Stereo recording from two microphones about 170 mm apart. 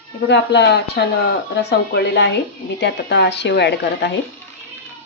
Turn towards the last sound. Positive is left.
turn(degrees=80)